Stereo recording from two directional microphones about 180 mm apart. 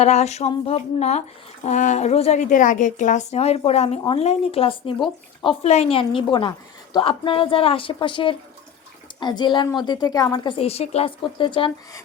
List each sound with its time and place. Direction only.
0.0 s a woman's voice: 40° left (ahead or behind)